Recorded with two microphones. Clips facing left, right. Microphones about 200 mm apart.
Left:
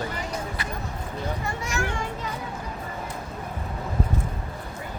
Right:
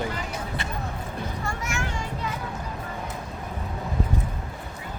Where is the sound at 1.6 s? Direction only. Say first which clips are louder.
Left 4 dB; 35° left (ahead or behind).